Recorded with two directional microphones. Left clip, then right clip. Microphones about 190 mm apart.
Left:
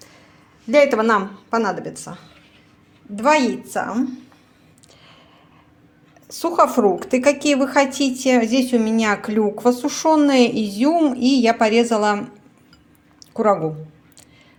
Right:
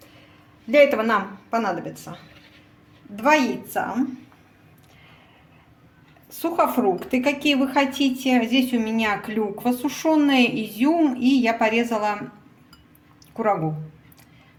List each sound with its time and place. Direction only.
0.7 s a woman's voice: 35° left (ahead or behind)
3.2 s a woman's voice: 40° left (ahead or behind)
6.2 s a woman's voice: 30° left (ahead or behind)
13.3 s speech: 35° left (ahead or behind)